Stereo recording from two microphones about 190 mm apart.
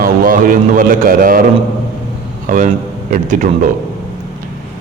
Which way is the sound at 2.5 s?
45° right (ahead or behind).